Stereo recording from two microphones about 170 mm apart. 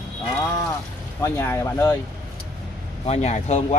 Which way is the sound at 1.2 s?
15° left (ahead or behind).